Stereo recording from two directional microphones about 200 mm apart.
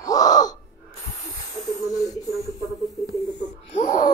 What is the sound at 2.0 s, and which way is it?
Speech, 15° left (ahead or behind).